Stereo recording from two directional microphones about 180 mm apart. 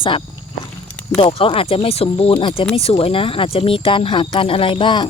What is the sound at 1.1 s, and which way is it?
Speech, 30° left (ahead or behind).